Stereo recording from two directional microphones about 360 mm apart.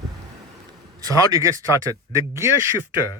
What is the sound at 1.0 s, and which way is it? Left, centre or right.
Speech, centre.